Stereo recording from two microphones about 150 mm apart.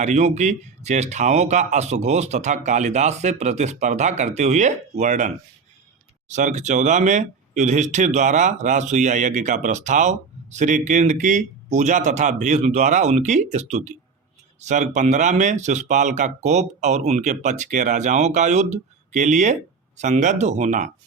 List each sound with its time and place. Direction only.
0.0 s speech: 50° right (ahead or behind)